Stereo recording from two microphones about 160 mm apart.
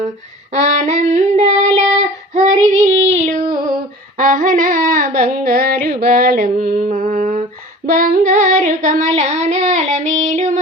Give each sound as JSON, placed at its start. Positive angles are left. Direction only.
{"t": 0.5, "sound": "child singing", "side_deg": -45}
{"t": 4.2, "sound": "a sound", "side_deg": -60}
{"t": 7.9, "sound": "child singing", "side_deg": -55}